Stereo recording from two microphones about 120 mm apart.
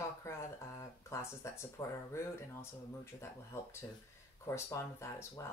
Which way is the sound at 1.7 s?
25° left (ahead or behind).